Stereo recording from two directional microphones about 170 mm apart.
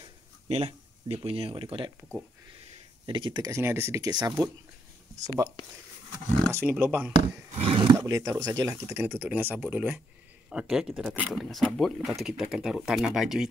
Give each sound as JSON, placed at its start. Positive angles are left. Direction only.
{"t": 0.0, "sound": "a sound", "side_deg": -35}
{"t": 3.1, "sound": "speech", "side_deg": -30}
{"t": 6.5, "sound": "speech", "side_deg": -10}
{"t": 7.5, "sound": "speech", "side_deg": -30}
{"t": 8.0, "sound": "speech", "side_deg": -20}